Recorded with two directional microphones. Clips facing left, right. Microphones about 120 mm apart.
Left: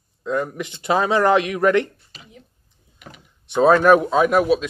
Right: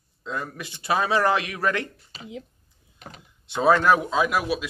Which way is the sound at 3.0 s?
35° right (ahead or behind).